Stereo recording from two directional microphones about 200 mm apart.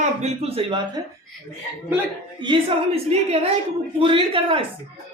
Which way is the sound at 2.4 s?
25° right (ahead or behind).